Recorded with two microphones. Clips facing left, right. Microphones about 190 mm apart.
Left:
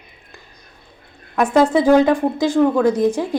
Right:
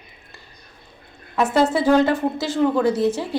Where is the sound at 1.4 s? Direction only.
15° left (ahead or behind).